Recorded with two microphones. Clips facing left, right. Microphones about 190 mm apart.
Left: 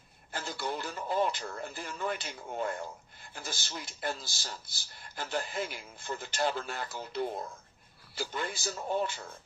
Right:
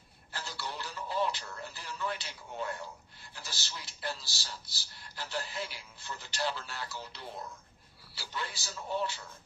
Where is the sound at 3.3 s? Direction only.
50° left (ahead or behind).